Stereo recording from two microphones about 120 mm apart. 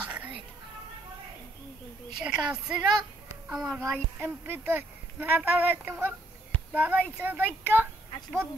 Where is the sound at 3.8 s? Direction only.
20° right (ahead or behind).